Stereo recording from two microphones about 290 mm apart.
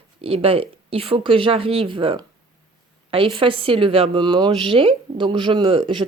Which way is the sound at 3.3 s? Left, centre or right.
Centre.